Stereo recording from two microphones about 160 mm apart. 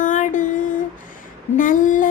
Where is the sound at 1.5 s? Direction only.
55° left (ahead or behind).